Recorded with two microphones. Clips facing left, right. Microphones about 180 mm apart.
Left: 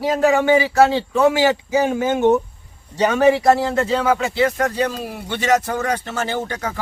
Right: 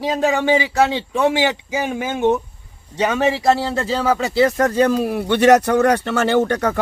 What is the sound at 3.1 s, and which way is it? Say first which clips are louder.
Speech: left 4 dB; 30° right (ahead or behind).